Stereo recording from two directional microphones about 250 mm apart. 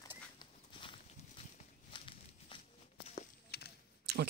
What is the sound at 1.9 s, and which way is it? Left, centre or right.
Walk, left.